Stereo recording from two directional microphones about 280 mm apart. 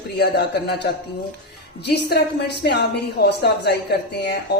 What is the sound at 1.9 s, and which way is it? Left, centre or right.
Speech, left.